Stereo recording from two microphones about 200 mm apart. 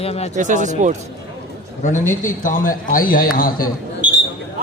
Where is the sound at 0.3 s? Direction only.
40° right (ahead or behind).